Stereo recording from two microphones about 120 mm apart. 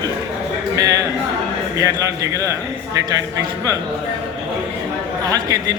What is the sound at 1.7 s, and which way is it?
Speech, 25° right (ahead or behind).